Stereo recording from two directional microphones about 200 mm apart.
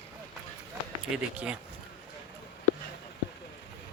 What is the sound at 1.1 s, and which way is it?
Speech, 5° right (ahead or behind).